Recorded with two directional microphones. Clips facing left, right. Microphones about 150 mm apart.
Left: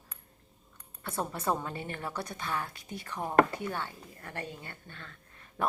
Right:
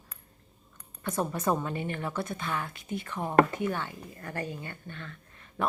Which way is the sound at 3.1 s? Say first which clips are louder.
Even; 10° left (ahead or behind).